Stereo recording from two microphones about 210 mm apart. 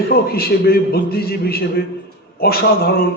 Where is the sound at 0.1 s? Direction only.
45° left (ahead or behind).